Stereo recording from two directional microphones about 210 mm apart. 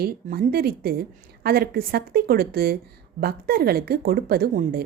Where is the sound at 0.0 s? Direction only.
45° right (ahead or behind).